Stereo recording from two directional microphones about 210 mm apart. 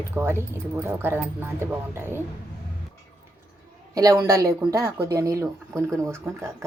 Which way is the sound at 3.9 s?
15° right (ahead or behind).